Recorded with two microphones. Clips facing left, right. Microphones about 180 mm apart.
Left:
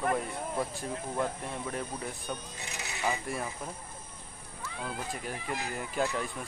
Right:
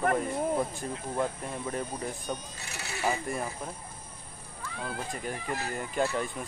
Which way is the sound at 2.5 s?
15° left (ahead or behind).